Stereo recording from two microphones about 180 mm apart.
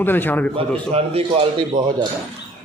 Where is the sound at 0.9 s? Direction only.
35° right (ahead or behind).